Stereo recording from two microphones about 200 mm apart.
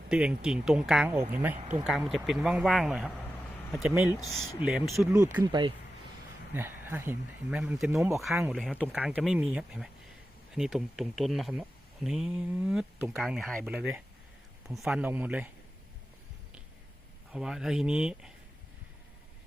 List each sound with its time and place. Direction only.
0.1 s speech: 5° right (ahead or behind)
1.5 s speech: 40° right (ahead or behind)
1.8 s speech: 5° right (ahead or behind); by 5.7 s 20° right (ahead or behind)
6.5 s speech: 10° right (ahead or behind)
17.3 s speech: 5° right (ahead or behind)